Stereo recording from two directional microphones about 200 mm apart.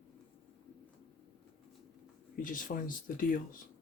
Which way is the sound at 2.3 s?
40° left (ahead or behind).